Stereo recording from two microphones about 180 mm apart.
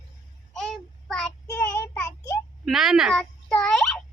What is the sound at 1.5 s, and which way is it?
Child singing, 20° left (ahead or behind).